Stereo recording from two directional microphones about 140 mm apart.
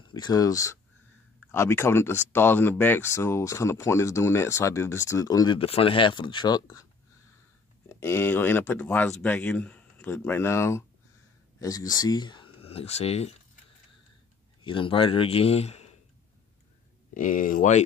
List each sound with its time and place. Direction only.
0.1 s speech: 30° left (ahead or behind)
5.6 s speech: 40° left (ahead or behind)
8.0 s speech: 15° left (ahead or behind); by 13.3 s 50° left (ahead or behind)
14.6 s a man's voice: 35° left (ahead or behind)
17.1 s speech: 70° left (ahead or behind)